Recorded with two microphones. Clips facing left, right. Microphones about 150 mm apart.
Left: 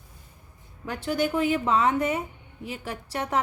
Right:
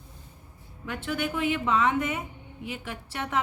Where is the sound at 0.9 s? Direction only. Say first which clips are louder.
Left 4 dB; 35° left (ahead or behind).